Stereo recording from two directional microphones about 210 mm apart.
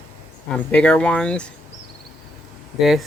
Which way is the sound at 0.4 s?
5° left (ahead or behind).